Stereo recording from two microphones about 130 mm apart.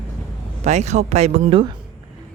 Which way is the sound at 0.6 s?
60° right (ahead or behind).